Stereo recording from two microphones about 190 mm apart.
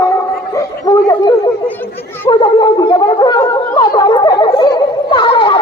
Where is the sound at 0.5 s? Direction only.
20° left (ahead or behind).